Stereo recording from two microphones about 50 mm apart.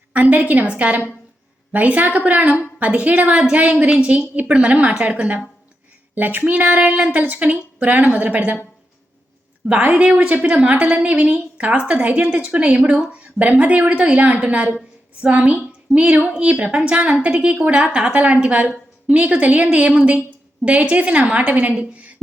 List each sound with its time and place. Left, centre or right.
0.1 s a woman's voice: right
9.9 s a woman's voice: right